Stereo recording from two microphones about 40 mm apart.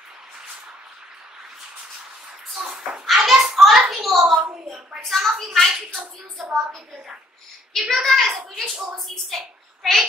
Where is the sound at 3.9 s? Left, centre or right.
Centre.